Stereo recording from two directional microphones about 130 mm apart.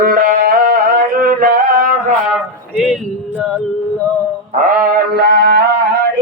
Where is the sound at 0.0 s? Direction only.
90° right.